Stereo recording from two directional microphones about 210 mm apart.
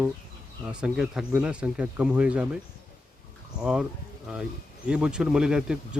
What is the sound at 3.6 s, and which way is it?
Speech, 5° right (ahead or behind).